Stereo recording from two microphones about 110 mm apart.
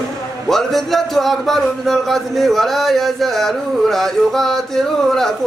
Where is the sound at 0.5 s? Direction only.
Centre (ahead or behind).